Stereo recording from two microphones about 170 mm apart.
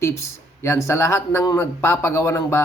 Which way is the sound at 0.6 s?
15° left (ahead or behind).